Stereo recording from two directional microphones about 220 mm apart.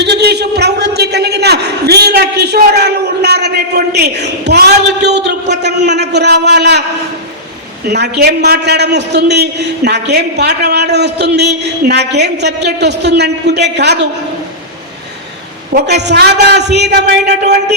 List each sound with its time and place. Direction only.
0.0 s a sound: 50° right (ahead or behind)
7.9 s a man's voice: 50° right (ahead or behind)
15.7 s a man's voice: 50° right (ahead or behind)